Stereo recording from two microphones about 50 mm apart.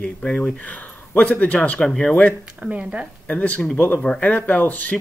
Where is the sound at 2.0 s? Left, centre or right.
Left.